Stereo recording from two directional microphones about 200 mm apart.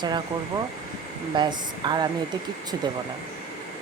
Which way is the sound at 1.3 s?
20° right (ahead or behind).